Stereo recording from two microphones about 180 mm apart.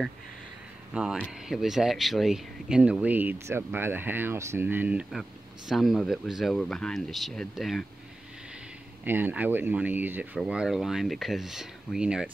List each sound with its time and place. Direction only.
1.2 s speech: centre (ahead or behind)
9.0 s speech: 10° right (ahead or behind)